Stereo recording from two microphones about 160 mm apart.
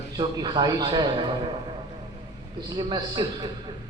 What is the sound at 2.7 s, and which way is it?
Speech, 25° right (ahead or behind).